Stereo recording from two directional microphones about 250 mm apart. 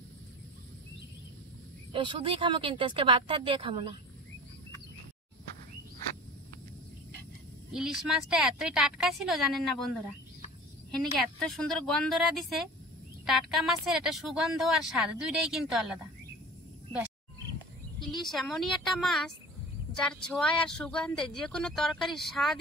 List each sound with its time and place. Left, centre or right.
1.9 s speech: centre
7.7 s a woman's voice: centre
18.3 s a woman's voice: centre